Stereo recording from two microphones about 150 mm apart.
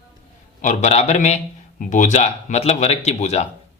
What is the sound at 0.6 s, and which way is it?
Speech, 50° left (ahead or behind).